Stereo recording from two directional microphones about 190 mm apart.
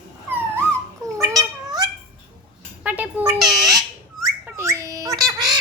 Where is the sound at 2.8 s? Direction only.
10° right (ahead or behind).